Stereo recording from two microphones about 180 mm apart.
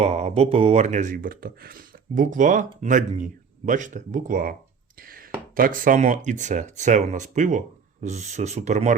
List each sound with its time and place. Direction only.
0.0 s speech: 35° right (ahead or behind)
4.9 s a sound: 55° right (ahead or behind)
5.5 s speech: 50° right (ahead or behind)